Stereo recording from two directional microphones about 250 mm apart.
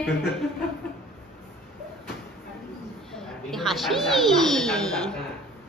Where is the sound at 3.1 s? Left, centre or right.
Centre.